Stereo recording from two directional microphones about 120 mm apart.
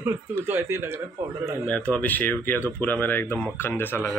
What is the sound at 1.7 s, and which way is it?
Speech, 10° left (ahead or behind).